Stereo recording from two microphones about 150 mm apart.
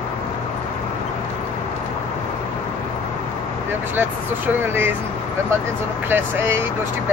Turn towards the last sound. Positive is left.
turn(degrees=-15)  # may be behind; listen again after turning